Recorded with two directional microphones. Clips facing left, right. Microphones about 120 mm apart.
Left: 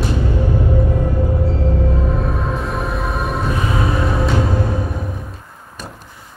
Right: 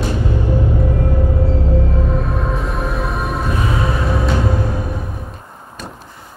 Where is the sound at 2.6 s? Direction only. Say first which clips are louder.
Even; centre (ahead or behind).